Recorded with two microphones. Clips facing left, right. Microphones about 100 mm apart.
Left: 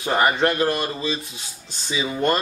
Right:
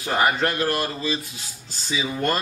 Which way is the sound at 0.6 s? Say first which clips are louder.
Left 2 dB; 25° left (ahead or behind).